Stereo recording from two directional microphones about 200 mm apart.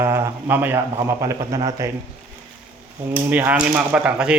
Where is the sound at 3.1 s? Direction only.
10° right (ahead or behind).